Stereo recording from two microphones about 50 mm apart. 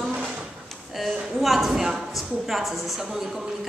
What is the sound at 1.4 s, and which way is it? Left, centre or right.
A woman's voice, centre.